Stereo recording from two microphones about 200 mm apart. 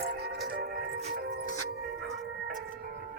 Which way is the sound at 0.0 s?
50° right (ahead or behind).